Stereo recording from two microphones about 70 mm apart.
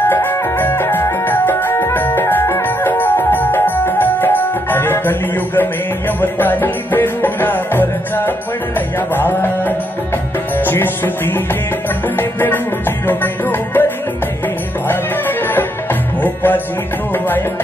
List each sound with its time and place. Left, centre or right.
0.1 s music: left